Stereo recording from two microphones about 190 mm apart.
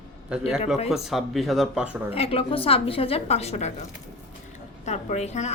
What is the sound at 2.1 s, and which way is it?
A woman's voice, 30° left (ahead or behind).